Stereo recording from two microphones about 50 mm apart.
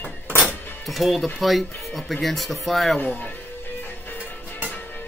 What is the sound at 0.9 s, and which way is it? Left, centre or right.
Speech, centre.